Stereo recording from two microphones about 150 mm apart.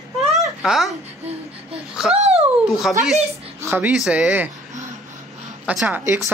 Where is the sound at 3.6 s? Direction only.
20° right (ahead or behind).